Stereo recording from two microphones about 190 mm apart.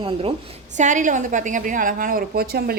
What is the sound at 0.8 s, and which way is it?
A woman's voice, 40° right (ahead or behind).